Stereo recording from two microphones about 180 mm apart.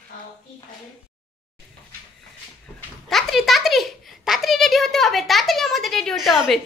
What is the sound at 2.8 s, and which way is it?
A child's voice, centre (ahead or behind).